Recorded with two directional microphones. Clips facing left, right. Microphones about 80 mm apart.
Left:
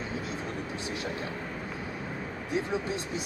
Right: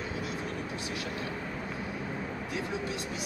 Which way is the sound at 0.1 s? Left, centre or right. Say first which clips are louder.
Left 1 dB; left.